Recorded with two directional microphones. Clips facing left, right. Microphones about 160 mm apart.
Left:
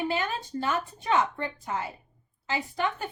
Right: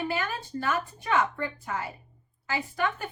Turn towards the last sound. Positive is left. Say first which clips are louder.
# even
turn(degrees=20)  # may be behind; listen again after turning